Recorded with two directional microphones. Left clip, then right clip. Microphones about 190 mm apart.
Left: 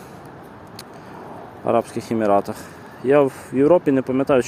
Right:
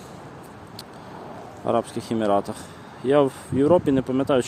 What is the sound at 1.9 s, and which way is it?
Speech, centre (ahead or behind).